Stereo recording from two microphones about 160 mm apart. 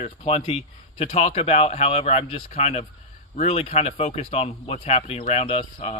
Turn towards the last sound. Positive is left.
turn(degrees=40)  # may be behind; listen again after turning